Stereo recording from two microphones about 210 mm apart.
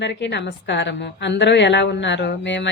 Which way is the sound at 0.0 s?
55° left (ahead or behind).